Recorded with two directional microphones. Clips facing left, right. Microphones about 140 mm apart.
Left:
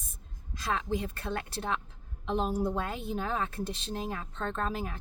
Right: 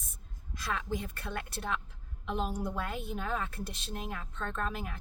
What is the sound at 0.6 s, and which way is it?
A woman's voice, 30° left (ahead or behind).